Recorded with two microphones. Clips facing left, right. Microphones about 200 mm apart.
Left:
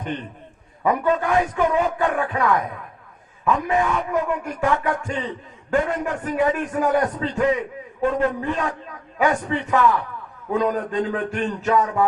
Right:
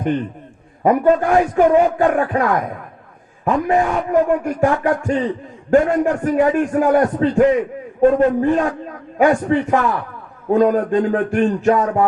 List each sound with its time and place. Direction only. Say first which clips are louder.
0.8 s a man's voice: right 6 dB; 40° right (ahead or behind)